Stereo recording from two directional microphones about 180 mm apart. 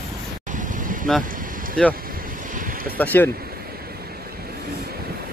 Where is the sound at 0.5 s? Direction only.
45° right (ahead or behind).